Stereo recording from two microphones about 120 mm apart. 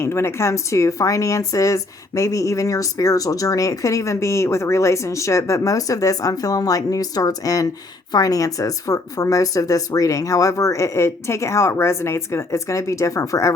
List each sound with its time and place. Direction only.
0.0 s speech: 20° left (ahead or behind)